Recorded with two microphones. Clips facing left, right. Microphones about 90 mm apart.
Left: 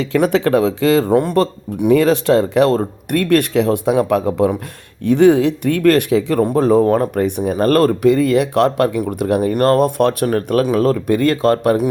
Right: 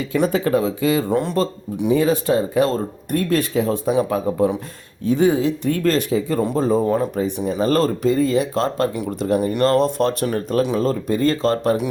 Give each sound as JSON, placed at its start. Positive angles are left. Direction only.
{"t": 0.0, "sound": "speech", "side_deg": 85}
{"t": 1.1, "sound": "speech", "side_deg": 55}
{"t": 6.4, "sound": "speech", "side_deg": 65}